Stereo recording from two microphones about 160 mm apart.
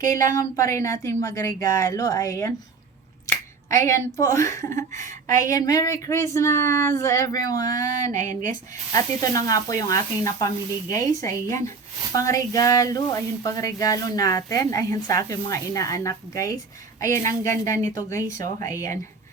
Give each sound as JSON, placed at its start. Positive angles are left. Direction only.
{"t": 0.0, "sound": "speech", "side_deg": 20}
{"t": 3.7, "sound": "speech", "side_deg": 20}
{"t": 4.9, "sound": "speech", "side_deg": -50}
{"t": 5.3, "sound": "speech", "side_deg": 20}
{"t": 8.2, "sound": "speech", "side_deg": -50}
{"t": 8.9, "sound": "speech", "side_deg": 20}